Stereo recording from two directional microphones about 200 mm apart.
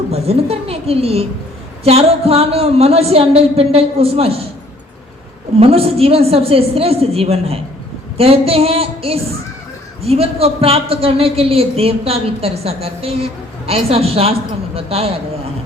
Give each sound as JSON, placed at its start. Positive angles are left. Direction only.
{"t": 0.1, "sound": "a woman's voice", "side_deg": -30}
{"t": 5.5, "sound": "a man's voice", "side_deg": -30}